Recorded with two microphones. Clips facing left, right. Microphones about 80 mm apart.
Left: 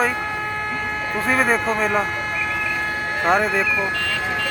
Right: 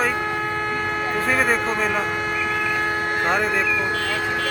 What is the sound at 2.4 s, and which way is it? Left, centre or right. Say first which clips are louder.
Vehicle: right 2 dB; centre.